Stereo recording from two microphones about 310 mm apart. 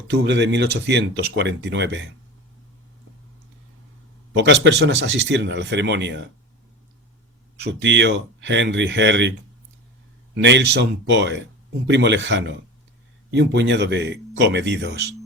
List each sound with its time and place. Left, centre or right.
0.1 s speech: right
4.4 s speech: right
7.6 s speech: right
10.3 s speech: right